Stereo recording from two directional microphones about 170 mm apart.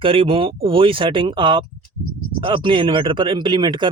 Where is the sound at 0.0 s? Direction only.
30° right (ahead or behind).